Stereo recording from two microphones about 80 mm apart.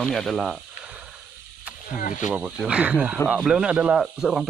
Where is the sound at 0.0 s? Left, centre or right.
Centre.